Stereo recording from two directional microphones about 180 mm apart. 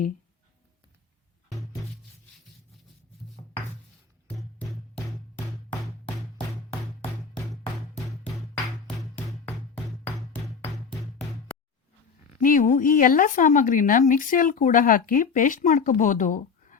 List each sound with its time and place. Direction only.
10.3 s music: 10° left (ahead or behind)
12.4 s speech: 45° left (ahead or behind)